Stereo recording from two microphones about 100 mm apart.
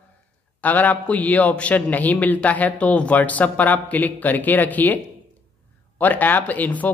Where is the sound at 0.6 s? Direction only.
15° left (ahead or behind).